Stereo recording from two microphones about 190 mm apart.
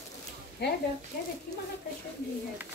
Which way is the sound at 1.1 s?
50° left (ahead or behind).